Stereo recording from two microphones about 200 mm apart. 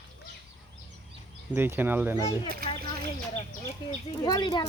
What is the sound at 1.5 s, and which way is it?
Speech, 10° right (ahead or behind).